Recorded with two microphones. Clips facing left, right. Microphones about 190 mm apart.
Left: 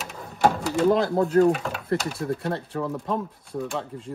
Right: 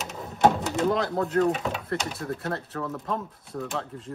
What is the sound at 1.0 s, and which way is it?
Speech, 25° left (ahead or behind).